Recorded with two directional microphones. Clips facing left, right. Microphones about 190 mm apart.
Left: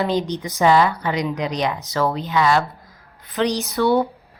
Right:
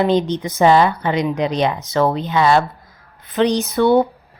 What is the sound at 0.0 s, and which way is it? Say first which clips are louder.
Speech: right 5 dB; 20° right (ahead or behind).